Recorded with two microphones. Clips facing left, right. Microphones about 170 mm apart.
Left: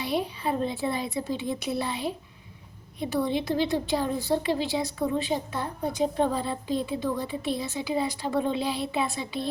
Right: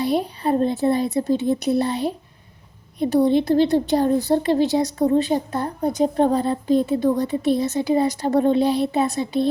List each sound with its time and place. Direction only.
0.0 s a woman's voice: 40° right (ahead or behind)